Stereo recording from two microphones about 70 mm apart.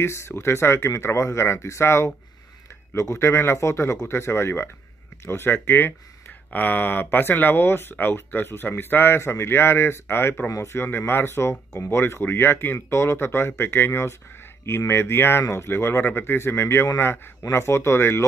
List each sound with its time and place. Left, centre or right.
0.0 s speech: left